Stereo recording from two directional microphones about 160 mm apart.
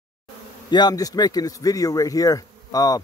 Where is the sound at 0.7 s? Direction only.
25° left (ahead or behind).